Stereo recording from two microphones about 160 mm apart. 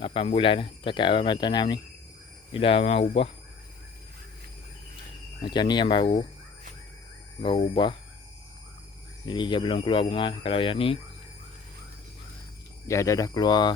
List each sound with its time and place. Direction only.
0.0 s speech: 35° left (ahead or behind)
5.4 s speech: 30° left (ahead or behind)
7.4 s speech: 35° left (ahead or behind)
9.2 s speech: 30° left (ahead or behind)
12.9 s speech: 20° left (ahead or behind)